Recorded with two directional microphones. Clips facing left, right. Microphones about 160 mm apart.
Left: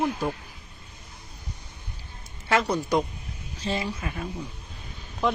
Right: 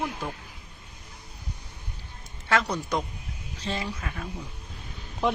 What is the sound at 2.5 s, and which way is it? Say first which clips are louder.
Speech: left 3 dB; 10° left (ahead or behind).